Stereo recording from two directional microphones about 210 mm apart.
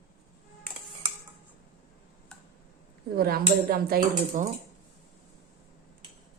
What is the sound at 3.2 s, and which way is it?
Speech, 45° right (ahead or behind).